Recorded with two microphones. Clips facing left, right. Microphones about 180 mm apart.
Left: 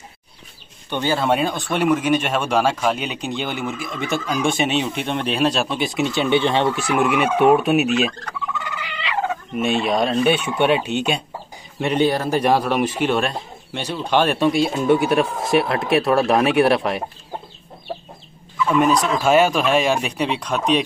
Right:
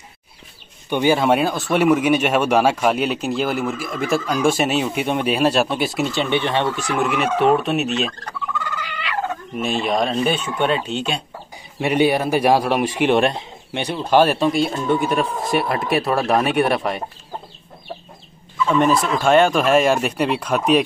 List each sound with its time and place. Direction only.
0.8 s speech: 10° right (ahead or behind); by 8.1 s 10° left (ahead or behind)
8.5 s turkey: 20° left (ahead or behind)
9.6 s speech: centre (ahead or behind)
10.4 s speech: 10° left (ahead or behind)
11.8 s speech: 10° right (ahead or behind)
18.7 s speech: centre (ahead or behind)